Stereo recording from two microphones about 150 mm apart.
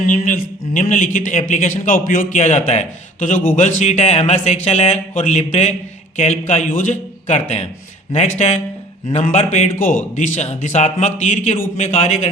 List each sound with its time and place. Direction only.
0.0 s a man's voice: 60° left (ahead or behind)